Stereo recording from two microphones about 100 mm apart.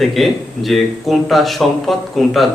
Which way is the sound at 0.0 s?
Centre (ahead or behind).